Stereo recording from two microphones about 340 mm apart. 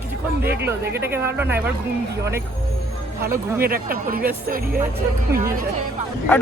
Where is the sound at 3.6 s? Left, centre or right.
Right.